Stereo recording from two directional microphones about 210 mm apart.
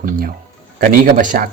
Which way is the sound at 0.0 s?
40° right (ahead or behind).